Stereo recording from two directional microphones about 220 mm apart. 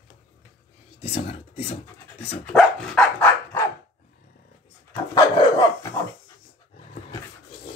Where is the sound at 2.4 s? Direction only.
Centre (ahead or behind).